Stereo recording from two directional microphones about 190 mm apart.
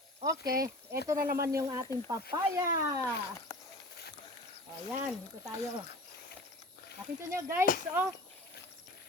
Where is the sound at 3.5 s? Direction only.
20° left (ahead or behind).